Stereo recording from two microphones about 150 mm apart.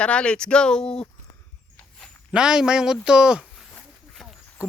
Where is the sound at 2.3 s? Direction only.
5° right (ahead or behind).